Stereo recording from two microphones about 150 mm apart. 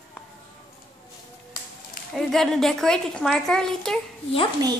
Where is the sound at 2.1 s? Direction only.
5° left (ahead or behind).